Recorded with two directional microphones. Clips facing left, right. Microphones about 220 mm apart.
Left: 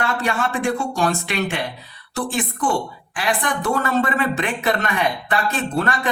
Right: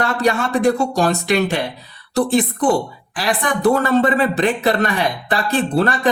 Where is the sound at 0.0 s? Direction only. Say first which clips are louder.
Right 4 dB; 40° right (ahead or behind).